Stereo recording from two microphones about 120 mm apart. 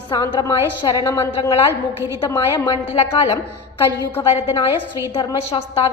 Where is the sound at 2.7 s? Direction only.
55° left (ahead or behind).